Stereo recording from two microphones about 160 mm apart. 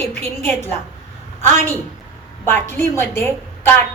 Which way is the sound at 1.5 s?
15° left (ahead or behind).